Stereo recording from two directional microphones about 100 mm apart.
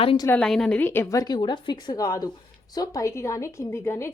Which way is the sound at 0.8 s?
20° left (ahead or behind).